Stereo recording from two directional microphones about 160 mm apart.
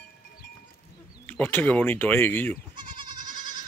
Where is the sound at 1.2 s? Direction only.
10° left (ahead or behind).